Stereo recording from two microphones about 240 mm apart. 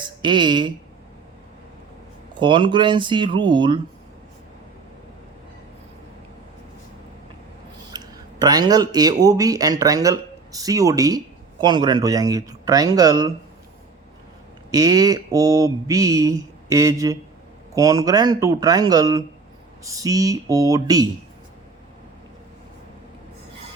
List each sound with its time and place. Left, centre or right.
0.0 s a woman's voice: centre
2.4 s speech: centre
7.9 s speech: centre
14.7 s speech: centre